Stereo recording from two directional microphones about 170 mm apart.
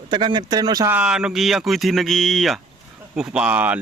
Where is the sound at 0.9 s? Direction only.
5° right (ahead or behind).